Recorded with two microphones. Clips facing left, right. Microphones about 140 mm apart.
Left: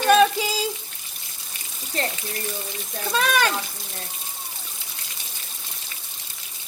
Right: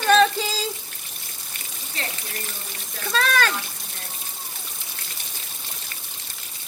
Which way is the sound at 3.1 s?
15° left (ahead or behind).